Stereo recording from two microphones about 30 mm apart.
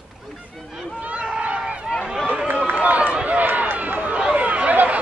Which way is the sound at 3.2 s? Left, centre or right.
Right.